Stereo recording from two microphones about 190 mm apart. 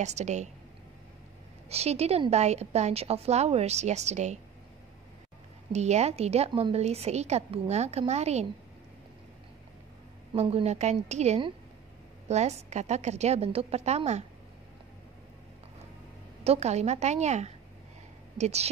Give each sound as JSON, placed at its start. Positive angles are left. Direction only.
{"t": 0.0, "sound": "a woman's voice", "side_deg": -35}
{"t": 1.7, "sound": "a woman's voice", "side_deg": -35}
{"t": 5.7, "sound": "a woman's voice", "side_deg": -35}
{"t": 10.3, "sound": "a woman's voice", "side_deg": -30}
{"t": 16.4, "sound": "a woman's voice", "side_deg": -35}